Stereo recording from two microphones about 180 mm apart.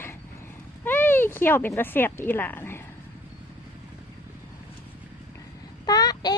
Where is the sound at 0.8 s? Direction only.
10° left (ahead or behind).